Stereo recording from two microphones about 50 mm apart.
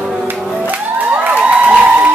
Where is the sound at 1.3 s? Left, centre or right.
Right.